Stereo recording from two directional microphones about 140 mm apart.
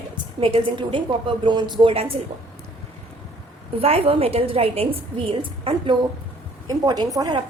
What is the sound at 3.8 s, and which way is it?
A woman's voice, 45° right (ahead or behind).